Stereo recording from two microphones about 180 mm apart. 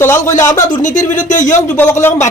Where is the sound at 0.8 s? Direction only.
45° left (ahead or behind).